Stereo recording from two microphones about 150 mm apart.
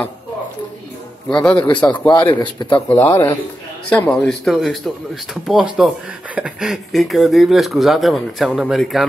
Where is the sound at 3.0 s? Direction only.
20° left (ahead or behind).